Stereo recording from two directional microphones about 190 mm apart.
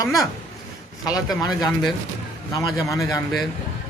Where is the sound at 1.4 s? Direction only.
20° left (ahead or behind).